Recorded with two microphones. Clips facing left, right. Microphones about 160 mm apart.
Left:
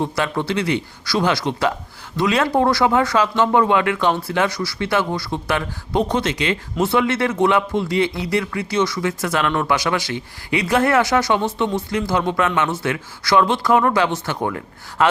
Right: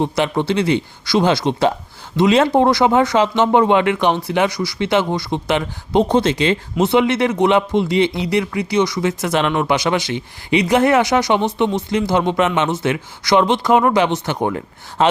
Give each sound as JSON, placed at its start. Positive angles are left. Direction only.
{"t": 0.0, "sound": "speech", "side_deg": -20}